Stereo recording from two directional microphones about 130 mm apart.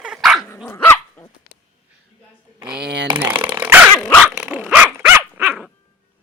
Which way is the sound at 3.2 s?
15° right (ahead or behind).